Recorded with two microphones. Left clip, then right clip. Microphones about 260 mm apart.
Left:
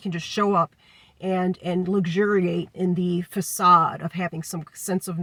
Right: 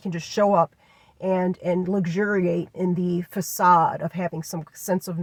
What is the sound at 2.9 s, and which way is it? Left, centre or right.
Speech, centre.